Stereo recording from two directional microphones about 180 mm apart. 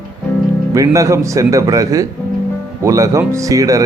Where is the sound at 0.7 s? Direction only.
15° right (ahead or behind).